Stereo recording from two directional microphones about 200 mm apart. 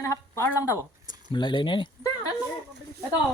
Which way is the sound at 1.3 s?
25° left (ahead or behind).